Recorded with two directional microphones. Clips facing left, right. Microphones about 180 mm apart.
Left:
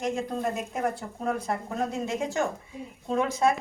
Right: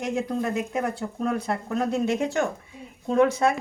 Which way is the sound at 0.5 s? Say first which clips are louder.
Right 3 dB; 70° right (ahead or behind).